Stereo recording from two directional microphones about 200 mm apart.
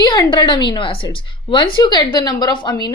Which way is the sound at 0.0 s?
20° left (ahead or behind).